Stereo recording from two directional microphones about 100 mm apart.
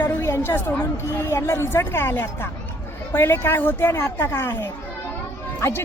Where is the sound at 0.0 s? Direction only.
20° left (ahead or behind).